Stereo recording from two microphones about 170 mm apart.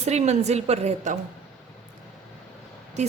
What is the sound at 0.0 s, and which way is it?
A woman's voice, 40° right (ahead or behind).